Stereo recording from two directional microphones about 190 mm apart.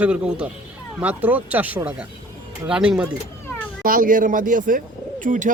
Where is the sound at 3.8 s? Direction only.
50° right (ahead or behind).